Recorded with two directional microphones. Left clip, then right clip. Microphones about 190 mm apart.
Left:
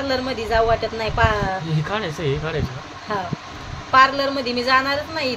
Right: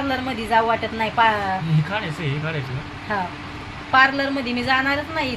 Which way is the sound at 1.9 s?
60° left (ahead or behind).